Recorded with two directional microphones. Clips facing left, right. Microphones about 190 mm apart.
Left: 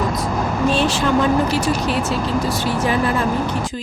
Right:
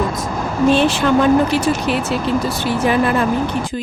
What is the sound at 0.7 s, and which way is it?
A woman's voice, 60° right (ahead or behind).